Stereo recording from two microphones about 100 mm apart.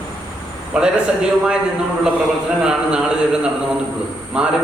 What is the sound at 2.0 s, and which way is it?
A man's voice, 5° right (ahead or behind).